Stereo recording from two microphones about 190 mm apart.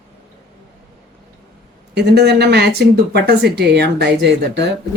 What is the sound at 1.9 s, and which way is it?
Speech, 60° right (ahead or behind).